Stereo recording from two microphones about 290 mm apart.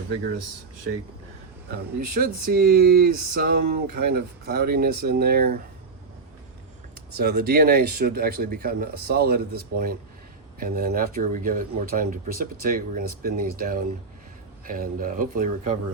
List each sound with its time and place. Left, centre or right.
2.0 s speech: right
7.2 s speech: right